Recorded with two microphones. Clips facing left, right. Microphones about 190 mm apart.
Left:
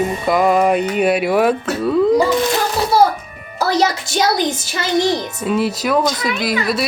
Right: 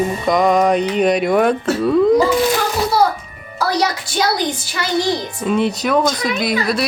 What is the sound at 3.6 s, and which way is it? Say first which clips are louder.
Music: left 2 dB; 25° left (ahead or behind).